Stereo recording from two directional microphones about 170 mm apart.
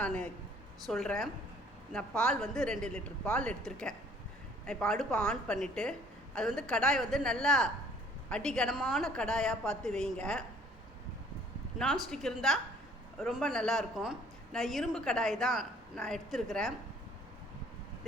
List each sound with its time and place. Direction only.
0.0 s a woman's voice: 5° left (ahead or behind)
12.1 s a woman's voice: centre (ahead or behind)